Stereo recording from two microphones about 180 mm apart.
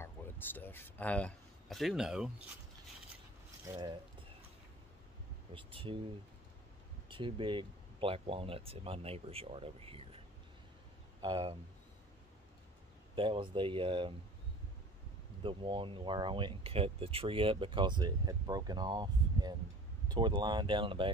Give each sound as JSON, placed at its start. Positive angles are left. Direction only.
{"t": 0.0, "sound": "speech", "side_deg": 10}
{"t": 3.6, "sound": "speech", "side_deg": -25}
{"t": 5.5, "sound": "speech", "side_deg": -30}
{"t": 7.1, "sound": "speech", "side_deg": -30}
{"t": 13.1, "sound": "speech", "side_deg": -30}
{"t": 15.4, "sound": "speech", "side_deg": -30}